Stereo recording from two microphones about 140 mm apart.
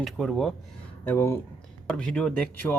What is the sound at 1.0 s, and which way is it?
Speech, 20° left (ahead or behind).